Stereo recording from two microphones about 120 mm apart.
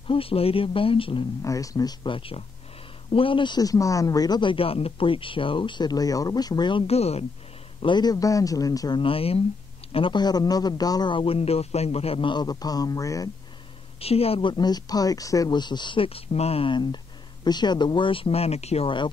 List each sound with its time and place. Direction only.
0.1 s speech: 50° left (ahead or behind)
1.4 s a man's voice: 30° left (ahead or behind)
2.1 s speech: 50° left (ahead or behind)
6.9 s a woman's voice: 60° left (ahead or behind)
7.8 s a man's voice: 40° left (ahead or behind)
9.0 s speech: 50° left (ahead or behind)
9.9 s speech: 40° left (ahead or behind)
13.9 s a woman's voice: 55° left (ahead or behind)
14.5 s speech: 35° left (ahead or behind); by 18.9 s 60° left (ahead or behind)